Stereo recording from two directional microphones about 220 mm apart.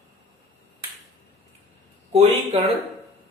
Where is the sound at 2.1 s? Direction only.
30° right (ahead or behind).